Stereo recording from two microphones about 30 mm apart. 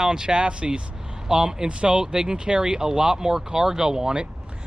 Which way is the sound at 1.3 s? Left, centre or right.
Right.